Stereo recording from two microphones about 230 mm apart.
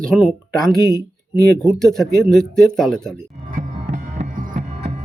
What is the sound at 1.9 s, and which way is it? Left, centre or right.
A man's voice, centre.